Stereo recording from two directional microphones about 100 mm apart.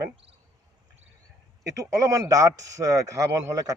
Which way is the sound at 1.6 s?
35° right (ahead or behind).